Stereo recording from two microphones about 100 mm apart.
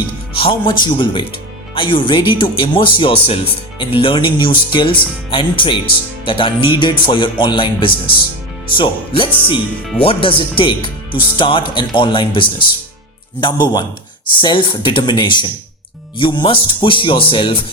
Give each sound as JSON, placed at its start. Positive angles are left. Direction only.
{"t": 0.3, "sound": "speech", "side_deg": 60}